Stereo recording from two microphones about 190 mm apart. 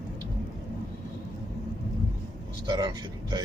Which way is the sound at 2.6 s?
25° right (ahead or behind).